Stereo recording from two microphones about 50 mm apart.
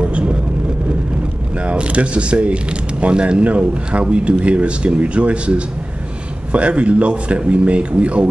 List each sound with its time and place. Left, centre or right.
0.0 s vehicle: right
1.6 s speech: right